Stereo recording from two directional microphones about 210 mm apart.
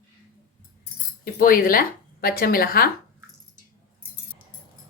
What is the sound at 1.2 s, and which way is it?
Speech, 45° left (ahead or behind).